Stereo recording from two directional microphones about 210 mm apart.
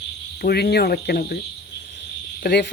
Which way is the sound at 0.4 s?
50° left (ahead or behind).